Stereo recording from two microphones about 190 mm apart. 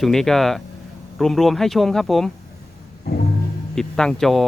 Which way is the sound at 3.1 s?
55° left (ahead or behind).